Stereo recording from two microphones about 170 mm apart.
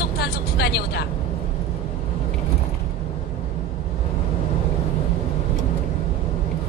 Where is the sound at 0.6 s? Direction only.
75° left (ahead or behind).